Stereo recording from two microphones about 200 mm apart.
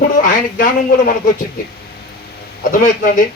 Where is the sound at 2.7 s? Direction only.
45° left (ahead or behind).